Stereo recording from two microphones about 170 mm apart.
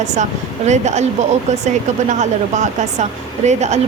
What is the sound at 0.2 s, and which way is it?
Speech, 45° right (ahead or behind).